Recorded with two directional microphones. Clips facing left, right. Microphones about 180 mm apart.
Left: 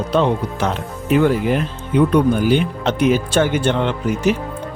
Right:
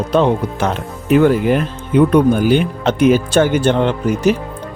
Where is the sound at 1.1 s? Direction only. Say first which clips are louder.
Right 4 dB; 50° right (ahead or behind).